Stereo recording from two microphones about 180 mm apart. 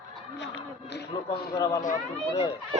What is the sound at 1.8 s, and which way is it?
Speech, 45° left (ahead or behind).